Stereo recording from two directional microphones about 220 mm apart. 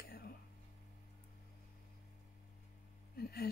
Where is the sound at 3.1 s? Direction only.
45° left (ahead or behind).